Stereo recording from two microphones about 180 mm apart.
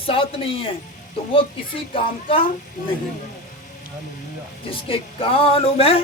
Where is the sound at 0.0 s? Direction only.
30° left (ahead or behind).